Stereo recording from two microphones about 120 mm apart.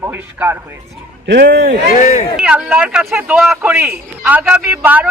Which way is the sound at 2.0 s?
90° left.